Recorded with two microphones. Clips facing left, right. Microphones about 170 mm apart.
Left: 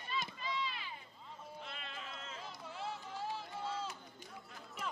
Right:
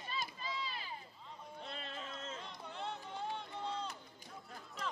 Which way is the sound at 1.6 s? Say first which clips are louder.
Right 5 dB; 35° right (ahead or behind).